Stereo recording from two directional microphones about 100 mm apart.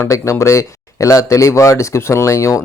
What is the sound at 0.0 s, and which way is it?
Speech, 30° left (ahead or behind).